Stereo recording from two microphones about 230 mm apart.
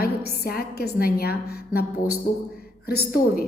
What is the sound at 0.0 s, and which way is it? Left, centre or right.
A woman's voice, left.